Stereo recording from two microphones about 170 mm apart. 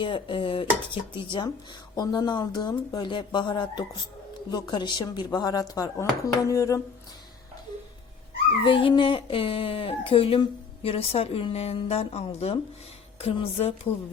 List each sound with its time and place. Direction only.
0.0 s speech: 30° left (ahead or behind)
8.6 s speech: 30° left (ahead or behind)